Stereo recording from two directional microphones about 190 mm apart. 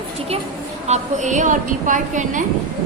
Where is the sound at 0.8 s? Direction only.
40° right (ahead or behind).